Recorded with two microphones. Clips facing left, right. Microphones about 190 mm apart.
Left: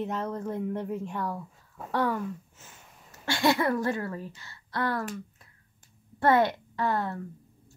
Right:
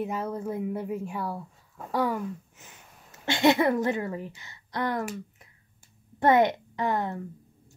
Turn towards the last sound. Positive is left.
turn(degrees=-20)  # may be behind; listen again after turning